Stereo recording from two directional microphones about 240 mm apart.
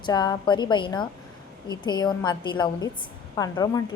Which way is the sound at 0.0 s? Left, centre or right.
Centre.